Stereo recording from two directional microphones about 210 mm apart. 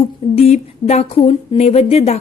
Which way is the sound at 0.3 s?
30° left (ahead or behind).